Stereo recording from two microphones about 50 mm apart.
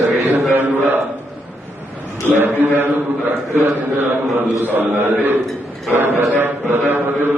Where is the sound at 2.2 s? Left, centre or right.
Right.